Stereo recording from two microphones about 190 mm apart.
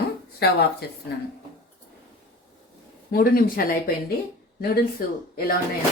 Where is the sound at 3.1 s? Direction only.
50° left (ahead or behind).